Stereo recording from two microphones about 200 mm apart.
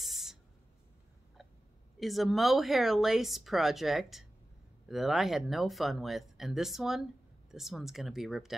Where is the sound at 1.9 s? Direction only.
Centre (ahead or behind).